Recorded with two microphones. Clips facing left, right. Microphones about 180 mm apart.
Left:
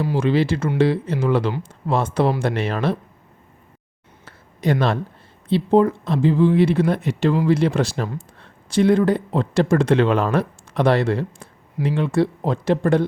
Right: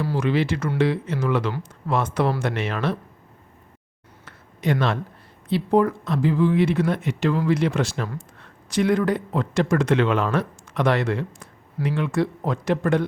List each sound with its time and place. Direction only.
0.2 s speech: 30° left (ahead or behind)
4.3 s a sound: 35° left (ahead or behind)
5.5 s speech: 25° left (ahead or behind)